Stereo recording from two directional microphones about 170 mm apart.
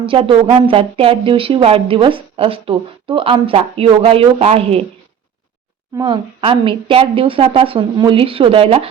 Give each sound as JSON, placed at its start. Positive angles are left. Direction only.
{"t": 0.0, "sound": "a woman's voice", "side_deg": -30}
{"t": 6.0, "sound": "a woman's voice", "side_deg": -30}